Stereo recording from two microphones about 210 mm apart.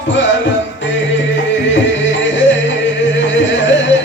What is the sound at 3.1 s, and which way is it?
Music, 60° left (ahead or behind).